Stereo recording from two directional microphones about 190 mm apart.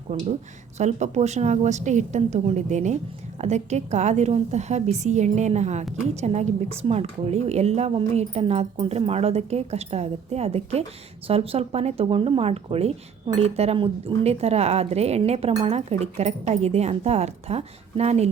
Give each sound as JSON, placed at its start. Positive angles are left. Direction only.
{"t": 0.1, "sound": "a woman's voice", "side_deg": -35}